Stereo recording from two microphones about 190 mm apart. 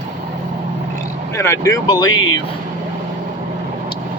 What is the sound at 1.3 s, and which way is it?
Speech, 15° left (ahead or behind).